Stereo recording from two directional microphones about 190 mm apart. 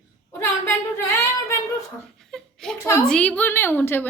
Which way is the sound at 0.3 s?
15° left (ahead or behind).